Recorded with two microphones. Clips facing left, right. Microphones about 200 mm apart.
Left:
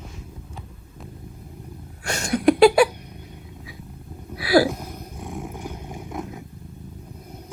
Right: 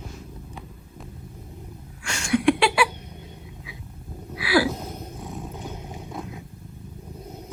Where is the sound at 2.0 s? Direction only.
40° left (ahead or behind).